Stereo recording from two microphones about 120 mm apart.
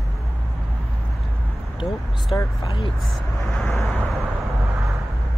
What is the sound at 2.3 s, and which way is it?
Speech, 40° left (ahead or behind).